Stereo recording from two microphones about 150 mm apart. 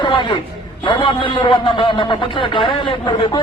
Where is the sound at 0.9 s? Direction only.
35° left (ahead or behind).